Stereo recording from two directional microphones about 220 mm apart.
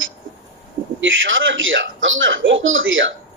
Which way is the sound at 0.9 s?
60° right (ahead or behind).